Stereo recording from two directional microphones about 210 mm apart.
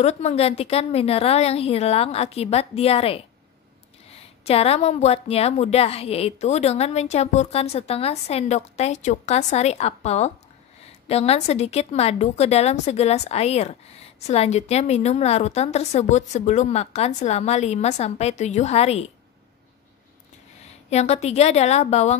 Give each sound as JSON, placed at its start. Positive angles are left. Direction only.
{"t": 0.0, "sound": "a woman's voice", "side_deg": 30}
{"t": 4.5, "sound": "a woman's voice", "side_deg": 30}
{"t": 20.9, "sound": "a woman's voice", "side_deg": 30}